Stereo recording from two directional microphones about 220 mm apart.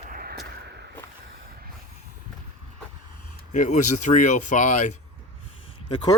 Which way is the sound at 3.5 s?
35° left (ahead or behind).